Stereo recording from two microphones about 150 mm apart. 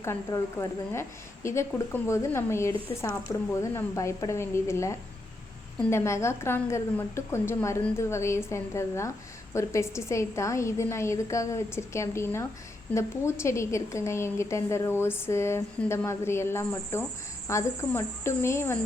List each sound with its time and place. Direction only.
0.0 s a woman's voice: 20° left (ahead or behind)